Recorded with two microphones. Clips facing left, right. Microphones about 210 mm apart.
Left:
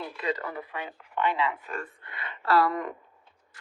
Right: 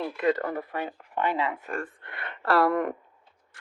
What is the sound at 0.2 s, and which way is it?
Speech, 50° right (ahead or behind).